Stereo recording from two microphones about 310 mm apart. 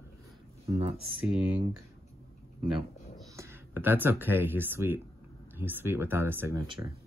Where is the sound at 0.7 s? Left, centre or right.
Centre.